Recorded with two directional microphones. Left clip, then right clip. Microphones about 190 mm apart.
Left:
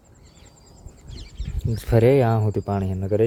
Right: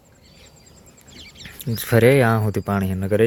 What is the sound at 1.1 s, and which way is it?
Bird, 40° left (ahead or behind).